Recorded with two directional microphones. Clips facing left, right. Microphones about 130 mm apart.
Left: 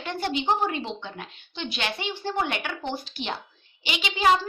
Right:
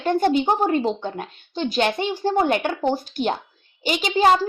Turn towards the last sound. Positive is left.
turn(degrees=-40)  # may be behind; listen again after turning